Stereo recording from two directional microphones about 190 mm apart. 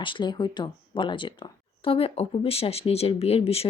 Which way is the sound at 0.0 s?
25° left (ahead or behind).